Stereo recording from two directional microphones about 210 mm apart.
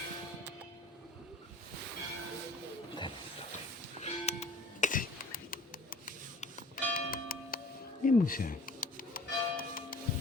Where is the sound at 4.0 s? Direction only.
30° left (ahead or behind).